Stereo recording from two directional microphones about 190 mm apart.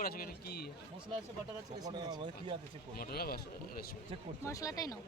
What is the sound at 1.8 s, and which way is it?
Speech, 20° right (ahead or behind).